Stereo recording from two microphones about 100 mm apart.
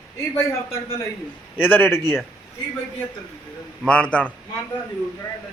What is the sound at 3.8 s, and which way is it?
Speech, 10° left (ahead or behind).